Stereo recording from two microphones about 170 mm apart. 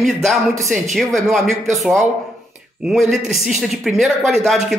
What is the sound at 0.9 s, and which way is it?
A woman's voice, centre (ahead or behind).